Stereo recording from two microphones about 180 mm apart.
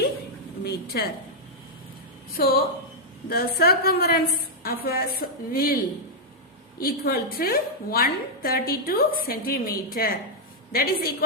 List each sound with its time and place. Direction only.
0.6 s a woman's voice: 65° left (ahead or behind)
2.3 s a woman's voice: 55° left (ahead or behind)